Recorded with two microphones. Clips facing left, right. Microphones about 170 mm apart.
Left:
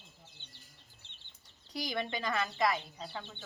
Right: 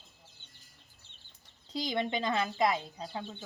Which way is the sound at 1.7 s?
20° right (ahead or behind).